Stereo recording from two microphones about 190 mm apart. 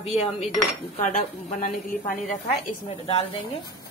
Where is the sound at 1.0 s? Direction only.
45° left (ahead or behind).